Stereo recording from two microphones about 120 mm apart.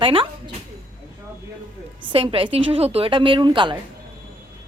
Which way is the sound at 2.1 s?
50° right (ahead or behind).